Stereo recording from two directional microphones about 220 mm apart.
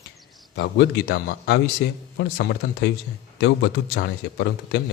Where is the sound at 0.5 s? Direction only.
50° left (ahead or behind).